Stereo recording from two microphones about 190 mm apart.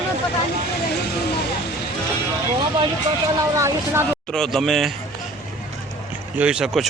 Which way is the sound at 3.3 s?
15° right (ahead or behind).